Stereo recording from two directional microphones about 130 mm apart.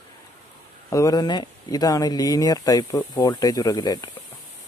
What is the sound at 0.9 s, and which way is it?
Speech, 30° left (ahead or behind).